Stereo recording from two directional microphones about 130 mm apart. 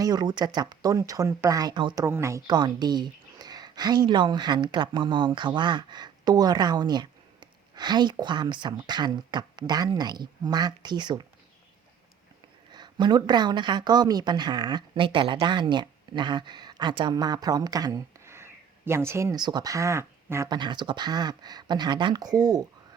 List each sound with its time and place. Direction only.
0.0 s speech: 30° right (ahead or behind)
2.0 s a woman's voice: 20° right (ahead or behind)
12.7 s a woman's voice: 35° right (ahead or behind)
19.4 s speech: 35° right (ahead or behind)
20.5 s a woman's voice: 35° right (ahead or behind)